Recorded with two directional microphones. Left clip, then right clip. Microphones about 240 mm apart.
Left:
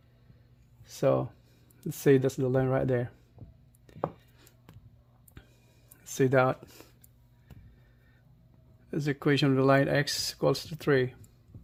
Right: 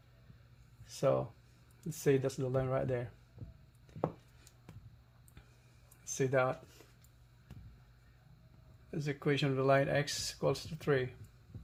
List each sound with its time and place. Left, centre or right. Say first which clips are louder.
0.9 s a sound: left 5 dB; left
1.9 s speech: left 8 dB; left
3.4 s heart sounds: even; centre
6.1 s speech: left 7 dB; left
8.9 s speech: left 7 dB; left